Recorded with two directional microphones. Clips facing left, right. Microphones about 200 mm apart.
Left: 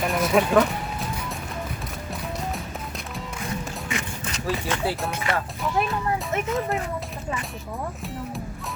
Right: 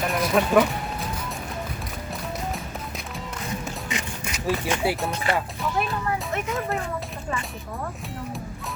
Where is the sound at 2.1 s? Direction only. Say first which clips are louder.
Even; centre (ahead or behind).